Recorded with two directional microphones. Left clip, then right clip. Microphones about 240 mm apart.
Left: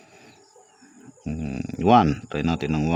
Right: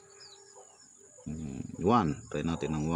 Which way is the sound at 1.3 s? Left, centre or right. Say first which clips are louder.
Left 10 dB; left.